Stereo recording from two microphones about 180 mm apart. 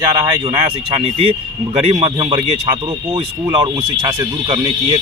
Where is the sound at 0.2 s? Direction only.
25° right (ahead or behind).